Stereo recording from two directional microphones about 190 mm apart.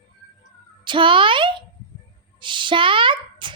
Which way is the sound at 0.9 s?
25° right (ahead or behind).